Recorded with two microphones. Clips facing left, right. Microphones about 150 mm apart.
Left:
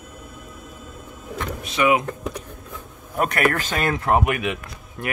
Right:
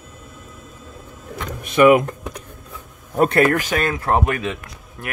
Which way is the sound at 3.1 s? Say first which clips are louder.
Right 5 dB; 30° right (ahead or behind).